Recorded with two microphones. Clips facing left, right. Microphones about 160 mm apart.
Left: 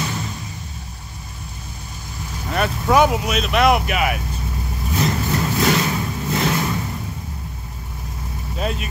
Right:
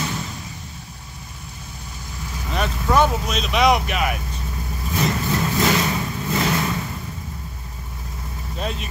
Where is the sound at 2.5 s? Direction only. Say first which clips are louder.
Left 3 dB; 10° left (ahead or behind).